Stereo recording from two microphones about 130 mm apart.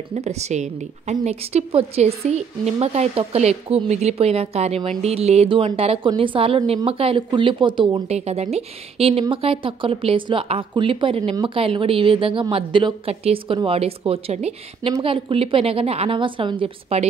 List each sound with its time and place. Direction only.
0.1 s a woman's voice: 60° right (ahead or behind); by 7.8 s 40° right (ahead or behind)
8.1 s a woman's voice: 55° right (ahead or behind)
15.0 s a woman's voice: 40° right (ahead or behind)